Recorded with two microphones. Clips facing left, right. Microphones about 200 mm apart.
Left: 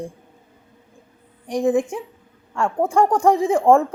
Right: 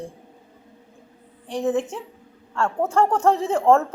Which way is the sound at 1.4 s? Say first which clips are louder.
Left 4 dB; 15° left (ahead or behind).